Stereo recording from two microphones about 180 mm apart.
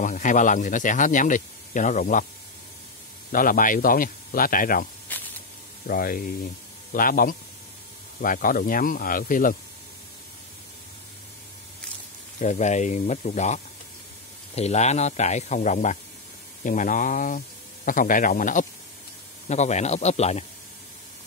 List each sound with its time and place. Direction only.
0.0 s speech: 45° left (ahead or behind)
3.3 s speech: 50° left (ahead or behind)
5.0 s snake: 10° left (ahead or behind)
5.9 s speech: 50° left (ahead or behind)
12.4 s a man's voice: 40° left (ahead or behind)